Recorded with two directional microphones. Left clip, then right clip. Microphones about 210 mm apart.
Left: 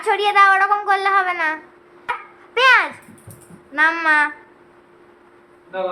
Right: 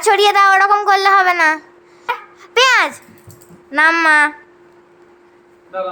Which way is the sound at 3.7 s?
45° right (ahead or behind).